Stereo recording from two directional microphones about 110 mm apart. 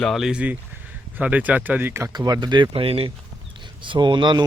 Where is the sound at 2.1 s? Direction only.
40° right (ahead or behind).